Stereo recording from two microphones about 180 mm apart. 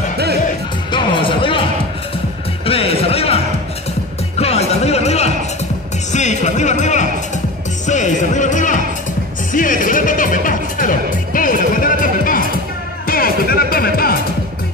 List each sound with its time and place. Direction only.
0.9 s music: 25° left (ahead or behind); by 14.2 s 55° left (ahead or behind)